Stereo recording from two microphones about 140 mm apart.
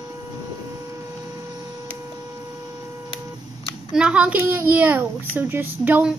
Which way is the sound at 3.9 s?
10° right (ahead or behind).